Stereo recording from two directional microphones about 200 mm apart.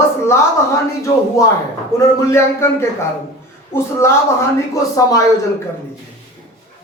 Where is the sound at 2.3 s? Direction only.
15° left (ahead or behind).